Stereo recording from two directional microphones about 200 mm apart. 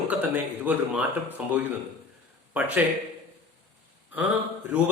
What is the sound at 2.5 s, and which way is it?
Speech, 10° right (ahead or behind).